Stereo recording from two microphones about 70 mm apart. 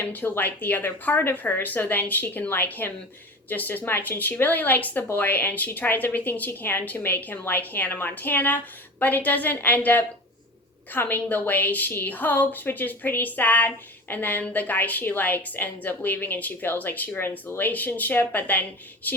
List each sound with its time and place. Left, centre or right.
0.0 s a woman's voice: left